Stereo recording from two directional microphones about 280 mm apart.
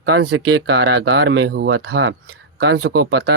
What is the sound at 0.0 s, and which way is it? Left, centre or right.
Speech, right.